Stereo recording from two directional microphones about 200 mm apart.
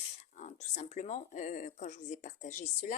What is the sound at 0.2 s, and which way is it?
Speech, 35° left (ahead or behind).